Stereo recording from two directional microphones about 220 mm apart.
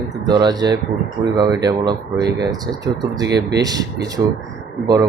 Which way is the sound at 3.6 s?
15° right (ahead or behind).